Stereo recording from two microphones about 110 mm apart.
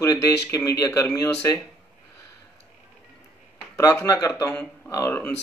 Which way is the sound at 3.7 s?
30° left (ahead or behind).